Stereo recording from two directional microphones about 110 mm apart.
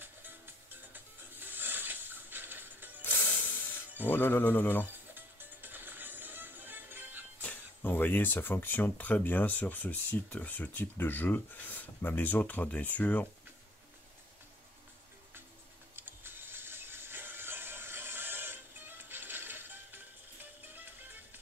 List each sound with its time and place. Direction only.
0.9 s music: 15° right (ahead or behind)
3.0 s music: 20° left (ahead or behind)
4.1 s speech: 20° left (ahead or behind)
5.1 s music: 20° right (ahead or behind)
7.4 s speech: 15° left (ahead or behind)
16.0 s music: 20° right (ahead or behind)